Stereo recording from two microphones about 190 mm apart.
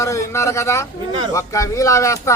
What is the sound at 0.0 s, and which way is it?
A man's voice, 15° left (ahead or behind).